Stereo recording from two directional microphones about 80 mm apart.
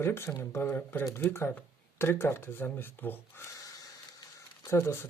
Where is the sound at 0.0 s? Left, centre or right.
Left.